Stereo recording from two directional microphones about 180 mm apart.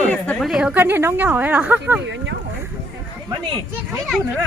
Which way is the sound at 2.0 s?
85° right.